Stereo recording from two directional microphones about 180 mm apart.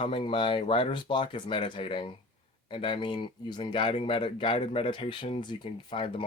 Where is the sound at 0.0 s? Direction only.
30° left (ahead or behind).